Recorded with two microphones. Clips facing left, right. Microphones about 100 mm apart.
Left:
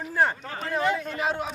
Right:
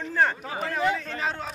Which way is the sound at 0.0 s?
15° left (ahead or behind).